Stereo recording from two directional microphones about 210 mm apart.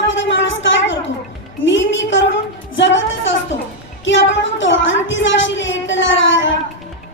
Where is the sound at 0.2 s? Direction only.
60° left (ahead or behind).